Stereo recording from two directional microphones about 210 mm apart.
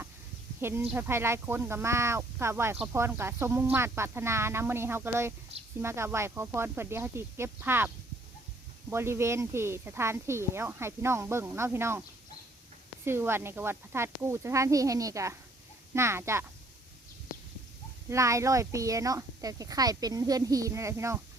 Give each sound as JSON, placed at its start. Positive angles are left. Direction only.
{"t": 0.6, "sound": "speech", "side_deg": -10}
{"t": 8.9, "sound": "speech", "side_deg": -10}
{"t": 13.1, "sound": "speech", "side_deg": -10}
{"t": 18.1, "sound": "speech", "side_deg": -15}